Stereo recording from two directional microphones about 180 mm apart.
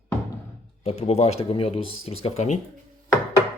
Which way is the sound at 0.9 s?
35° left (ahead or behind).